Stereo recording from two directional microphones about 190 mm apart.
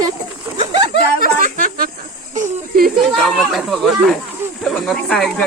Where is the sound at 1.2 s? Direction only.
45° right (ahead or behind).